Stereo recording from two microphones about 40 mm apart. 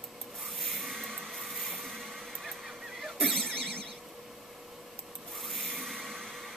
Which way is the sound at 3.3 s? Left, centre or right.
Centre.